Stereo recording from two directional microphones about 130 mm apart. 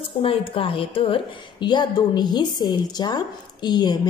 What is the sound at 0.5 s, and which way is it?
A woman's voice, 45° left (ahead or behind).